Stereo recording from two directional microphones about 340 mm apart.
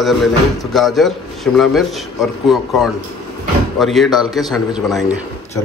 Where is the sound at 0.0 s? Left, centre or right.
Centre.